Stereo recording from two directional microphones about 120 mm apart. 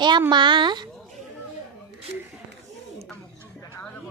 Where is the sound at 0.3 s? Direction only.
40° right (ahead or behind).